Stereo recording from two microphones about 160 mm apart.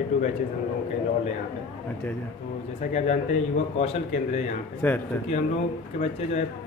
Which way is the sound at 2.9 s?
45° left (ahead or behind).